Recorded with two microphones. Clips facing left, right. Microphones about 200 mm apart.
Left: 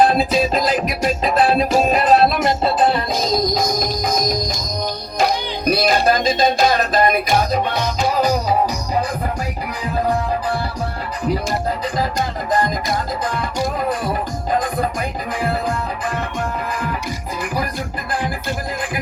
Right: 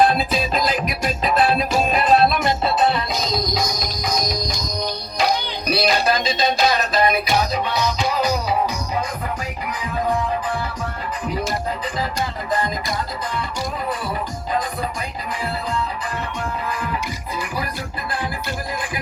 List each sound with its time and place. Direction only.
0.0 s music: 35° left (ahead or behind)
5.6 s music: 50° left (ahead or behind)
14.0 s music: 50° left (ahead or behind)